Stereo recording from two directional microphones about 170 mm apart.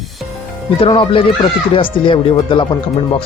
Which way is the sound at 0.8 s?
30° left (ahead or behind).